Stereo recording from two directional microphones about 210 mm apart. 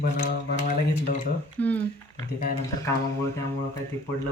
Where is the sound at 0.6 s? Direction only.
40° left (ahead or behind).